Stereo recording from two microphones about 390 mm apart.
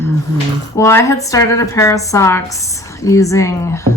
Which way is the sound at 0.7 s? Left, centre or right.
Centre.